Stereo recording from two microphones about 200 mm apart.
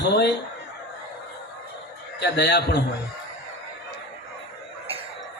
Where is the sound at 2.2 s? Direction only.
60° left (ahead or behind).